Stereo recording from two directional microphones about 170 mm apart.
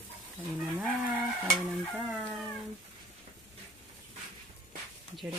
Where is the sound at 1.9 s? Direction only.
15° right (ahead or behind).